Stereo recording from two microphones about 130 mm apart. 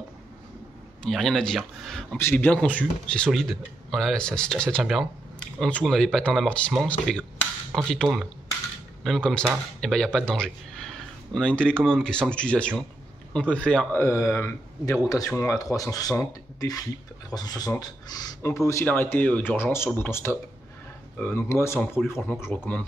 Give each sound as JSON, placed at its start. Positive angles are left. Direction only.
{"t": 1.0, "sound": "speech", "side_deg": 5}
{"t": 2.1, "sound": "speech", "side_deg": 15}
{"t": 13.9, "sound": "speech", "side_deg": 20}